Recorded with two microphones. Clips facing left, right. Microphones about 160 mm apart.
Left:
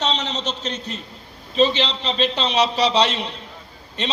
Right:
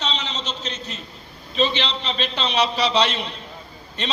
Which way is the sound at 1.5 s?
35° left (ahead or behind).